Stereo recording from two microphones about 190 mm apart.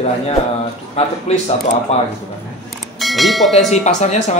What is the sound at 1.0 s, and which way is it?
Speech, 35° left (ahead or behind).